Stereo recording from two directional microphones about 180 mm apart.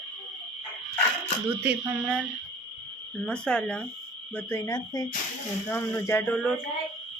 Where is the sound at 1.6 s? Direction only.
5° right (ahead or behind).